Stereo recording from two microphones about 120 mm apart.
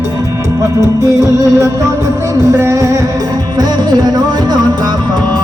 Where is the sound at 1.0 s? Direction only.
30° right (ahead or behind).